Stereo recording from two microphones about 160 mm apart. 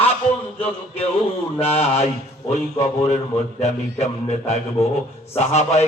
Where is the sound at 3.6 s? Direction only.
45° left (ahead or behind).